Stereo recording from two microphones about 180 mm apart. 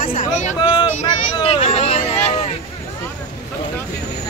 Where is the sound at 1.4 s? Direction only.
30° left (ahead or behind).